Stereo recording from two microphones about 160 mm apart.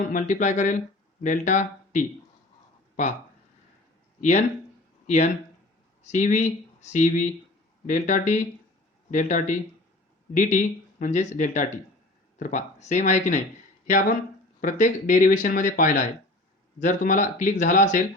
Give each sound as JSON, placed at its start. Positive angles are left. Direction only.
{"t": 0.1, "sound": "speech", "side_deg": 55}
{"t": 4.2, "sound": "speech", "side_deg": 45}